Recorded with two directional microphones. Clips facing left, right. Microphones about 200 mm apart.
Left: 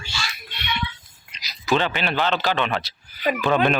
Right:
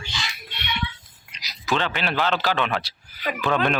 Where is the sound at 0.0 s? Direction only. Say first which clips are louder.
Left 1 dB; 15° right (ahead or behind).